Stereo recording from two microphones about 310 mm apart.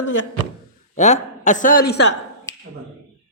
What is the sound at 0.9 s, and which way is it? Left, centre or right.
A man's voice, left.